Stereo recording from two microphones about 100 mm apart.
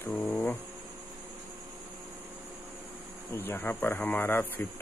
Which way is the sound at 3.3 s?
20° left (ahead or behind).